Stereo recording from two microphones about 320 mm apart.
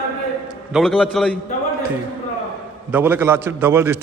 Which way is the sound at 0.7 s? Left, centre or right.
Centre.